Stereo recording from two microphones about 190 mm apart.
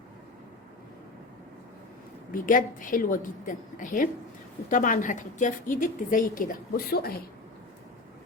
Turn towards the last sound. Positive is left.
turn(degrees=50)  # may be behind; listen again after turning